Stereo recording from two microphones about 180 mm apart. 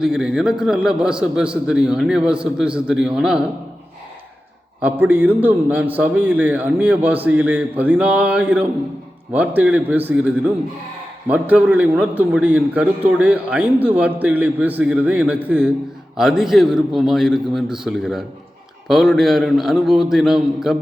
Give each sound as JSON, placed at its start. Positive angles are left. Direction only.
{"t": 0.0, "sound": "a man's voice", "side_deg": -5}
{"t": 4.8, "sound": "a man's voice", "side_deg": -10}